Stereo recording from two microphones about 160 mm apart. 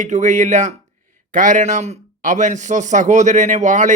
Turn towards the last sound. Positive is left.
turn(degrees=-50)  # may be behind; listen again after turning